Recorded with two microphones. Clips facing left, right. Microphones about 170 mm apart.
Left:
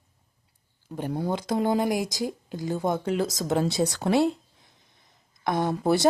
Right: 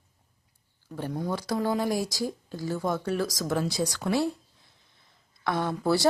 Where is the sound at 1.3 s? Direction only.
20° left (ahead or behind).